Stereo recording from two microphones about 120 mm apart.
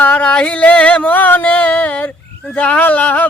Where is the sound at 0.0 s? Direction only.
10° left (ahead or behind).